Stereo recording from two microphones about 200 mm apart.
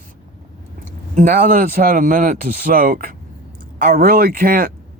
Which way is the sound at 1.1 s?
45° right (ahead or behind).